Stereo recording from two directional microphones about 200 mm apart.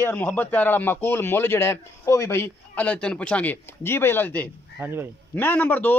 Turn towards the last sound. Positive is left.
turn(degrees=10)  # may be behind; listen again after turning